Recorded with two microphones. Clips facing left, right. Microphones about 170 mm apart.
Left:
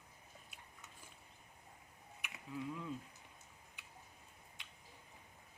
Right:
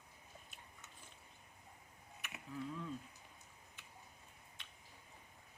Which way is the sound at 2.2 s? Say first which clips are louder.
Left 1 dB; 15° left (ahead or behind).